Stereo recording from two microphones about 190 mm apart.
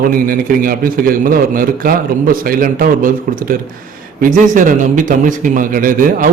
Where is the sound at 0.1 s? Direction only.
50° right (ahead or behind).